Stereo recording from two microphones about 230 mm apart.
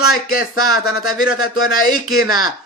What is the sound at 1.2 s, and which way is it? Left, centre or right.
Speech, left.